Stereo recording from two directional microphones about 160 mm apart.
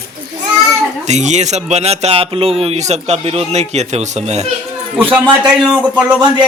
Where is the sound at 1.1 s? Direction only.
45° right (ahead or behind).